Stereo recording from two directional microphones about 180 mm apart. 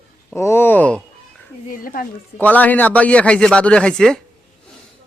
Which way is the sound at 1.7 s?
50° left (ahead or behind).